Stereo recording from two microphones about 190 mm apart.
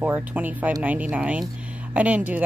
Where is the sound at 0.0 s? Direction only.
10° right (ahead or behind).